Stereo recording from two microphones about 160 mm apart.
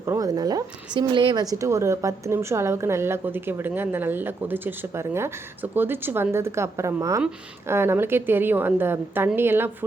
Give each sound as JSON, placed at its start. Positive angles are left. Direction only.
{"t": 0.0, "sound": "a woman's voice", "side_deg": -20}